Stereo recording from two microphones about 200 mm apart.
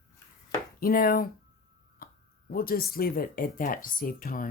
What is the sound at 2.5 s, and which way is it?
Speech, 50° left (ahead or behind).